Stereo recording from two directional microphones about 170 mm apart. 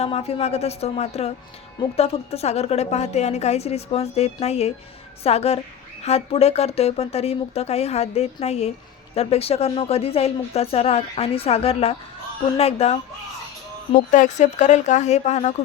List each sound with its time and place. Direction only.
0.0 s a woman's voice: 35° left (ahead or behind)
14.1 s speech: 45° left (ahead or behind)